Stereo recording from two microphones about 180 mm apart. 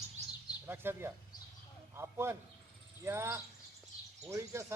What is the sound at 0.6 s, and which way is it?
Speech, 10° right (ahead or behind).